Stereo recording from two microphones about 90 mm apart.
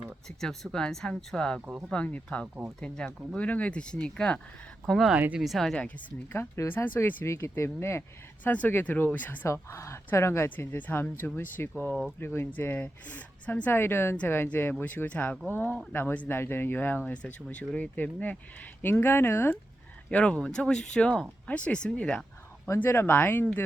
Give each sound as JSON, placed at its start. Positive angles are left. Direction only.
{"t": 0.3, "sound": "speech", "side_deg": 5}
{"t": 5.1, "sound": "speech", "side_deg": -15}
{"t": 5.4, "sound": "speech", "side_deg": 0}
{"t": 6.3, "sound": "speech", "side_deg": 25}
{"t": 7.3, "sound": "speech", "side_deg": 30}
{"t": 9.5, "sound": "speech", "side_deg": 30}
{"t": 20.1, "sound": "speech", "side_deg": 15}
{"t": 22.7, "sound": "speech", "side_deg": 25}